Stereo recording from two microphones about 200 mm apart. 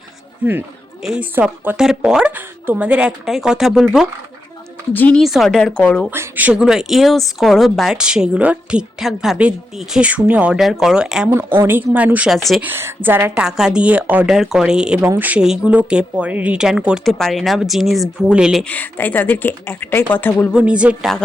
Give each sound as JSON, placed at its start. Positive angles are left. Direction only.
{"t": 1.0, "sound": "speech", "side_deg": -5}
{"t": 6.1, "sound": "speech", "side_deg": -10}
{"t": 12.6, "sound": "speech", "side_deg": -10}
{"t": 18.7, "sound": "speech", "side_deg": 10}
{"t": 20.5, "sound": "speech", "side_deg": -5}